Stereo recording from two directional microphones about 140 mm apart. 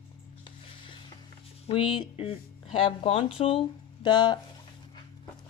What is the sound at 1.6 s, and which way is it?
Speech, 40° left (ahead or behind).